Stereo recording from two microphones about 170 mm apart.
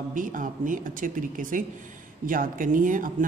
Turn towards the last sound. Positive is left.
turn(degrees=-50)  # may be behind; listen again after turning